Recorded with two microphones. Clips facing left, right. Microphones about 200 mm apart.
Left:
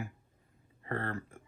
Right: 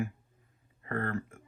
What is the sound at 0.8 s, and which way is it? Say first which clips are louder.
Speech: right 2 dB; 30° left (ahead or behind).